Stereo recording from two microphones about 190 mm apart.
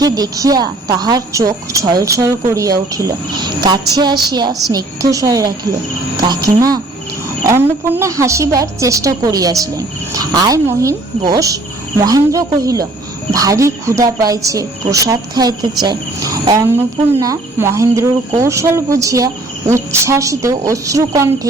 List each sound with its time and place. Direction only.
0.0 s speech: 20° right (ahead or behind)